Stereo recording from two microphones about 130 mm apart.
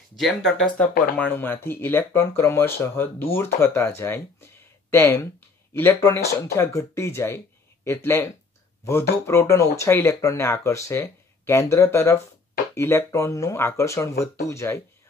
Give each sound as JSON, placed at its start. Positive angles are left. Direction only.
{"t": 0.2, "sound": "speech", "side_deg": 5}